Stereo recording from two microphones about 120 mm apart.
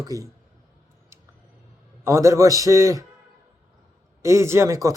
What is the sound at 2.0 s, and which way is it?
Speech, 25° right (ahead or behind).